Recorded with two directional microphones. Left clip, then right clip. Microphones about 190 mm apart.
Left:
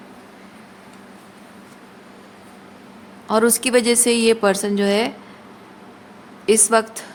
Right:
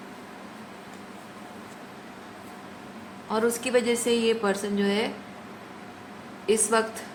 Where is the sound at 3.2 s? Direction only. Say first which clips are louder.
Left 8 dB; 70° left (ahead or behind).